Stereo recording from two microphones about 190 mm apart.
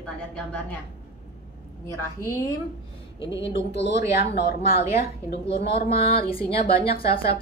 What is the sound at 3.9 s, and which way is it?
Speech, 60° left (ahead or behind).